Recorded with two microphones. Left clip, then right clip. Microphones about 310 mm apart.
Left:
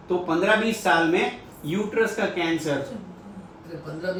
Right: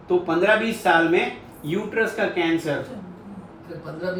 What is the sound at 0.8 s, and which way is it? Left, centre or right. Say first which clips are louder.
Speech: right 3 dB; centre.